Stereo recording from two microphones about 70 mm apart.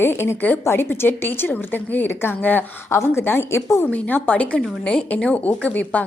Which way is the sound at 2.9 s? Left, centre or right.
Left.